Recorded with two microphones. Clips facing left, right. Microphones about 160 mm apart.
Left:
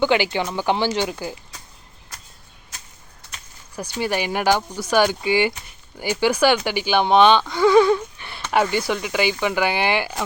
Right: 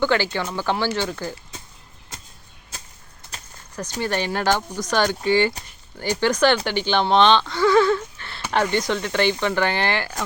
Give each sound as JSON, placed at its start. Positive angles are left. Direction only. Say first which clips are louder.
{"t": 0.0, "sound": "speech", "louder": "left 2 dB", "side_deg": 15}
{"t": 3.3, "sound": "a sound", "louder": "right 2 dB", "side_deg": -35}
{"t": 4.0, "sound": "speech", "louder": "left 2 dB", "side_deg": 10}